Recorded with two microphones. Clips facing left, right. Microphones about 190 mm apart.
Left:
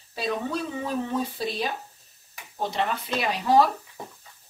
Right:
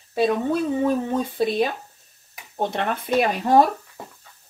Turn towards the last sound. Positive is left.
turn(degrees=-50)  # may be behind; listen again after turning